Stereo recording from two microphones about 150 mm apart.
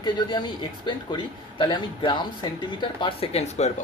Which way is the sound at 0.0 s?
30° left (ahead or behind).